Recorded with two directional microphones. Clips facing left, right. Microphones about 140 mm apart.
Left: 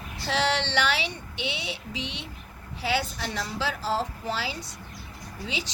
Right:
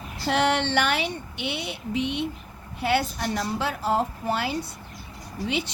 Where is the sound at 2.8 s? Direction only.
55° right (ahead or behind).